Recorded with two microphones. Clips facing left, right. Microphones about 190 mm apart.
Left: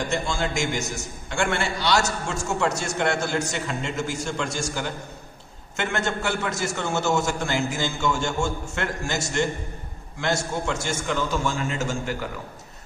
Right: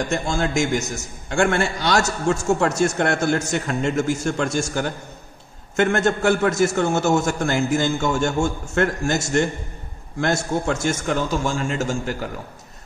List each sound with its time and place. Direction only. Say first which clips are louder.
0.1 s a man's voice: right 4 dB; 45° right (ahead or behind)